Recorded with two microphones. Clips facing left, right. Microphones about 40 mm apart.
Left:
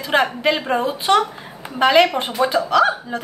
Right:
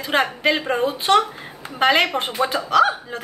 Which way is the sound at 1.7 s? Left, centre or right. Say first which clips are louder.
Left 3 dB; centre.